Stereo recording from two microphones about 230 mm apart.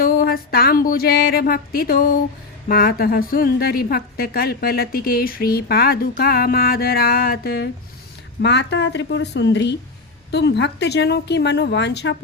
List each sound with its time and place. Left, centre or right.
0.0 s a woman's voice: left